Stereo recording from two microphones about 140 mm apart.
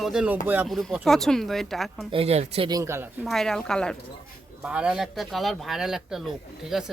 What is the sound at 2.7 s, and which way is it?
Speech, 20° right (ahead or behind).